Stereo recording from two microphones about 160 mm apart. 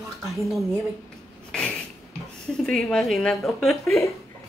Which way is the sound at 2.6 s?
Centre (ahead or behind).